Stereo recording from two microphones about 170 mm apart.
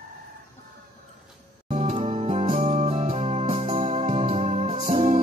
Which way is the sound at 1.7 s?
40° right (ahead or behind).